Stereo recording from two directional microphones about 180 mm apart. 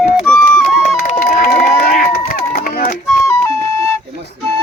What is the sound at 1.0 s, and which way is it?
Run, 45° left (ahead or behind).